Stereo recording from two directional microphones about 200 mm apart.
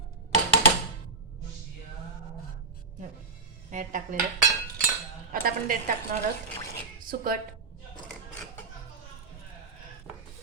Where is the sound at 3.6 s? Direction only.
40° right (ahead or behind).